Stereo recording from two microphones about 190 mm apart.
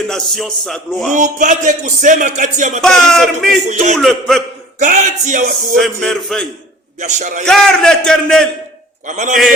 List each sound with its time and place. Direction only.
0.1 s a man's voice: centre (ahead or behind)
1.1 s speech: 40° right (ahead or behind)
2.8 s a man's voice: centre (ahead or behind)
3.7 s speech: 40° right (ahead or behind)
3.9 s a man's voice: centre (ahead or behind)
4.8 s a man's voice: 40° right (ahead or behind)
5.7 s a man's voice: centre (ahead or behind)
7.0 s speech: 40° right (ahead or behind)
7.4 s a man's voice: 5° left (ahead or behind)
9.0 s speech: 40° right (ahead or behind)